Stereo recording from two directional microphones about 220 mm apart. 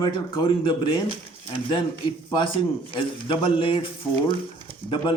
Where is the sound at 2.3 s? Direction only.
20° left (ahead or behind).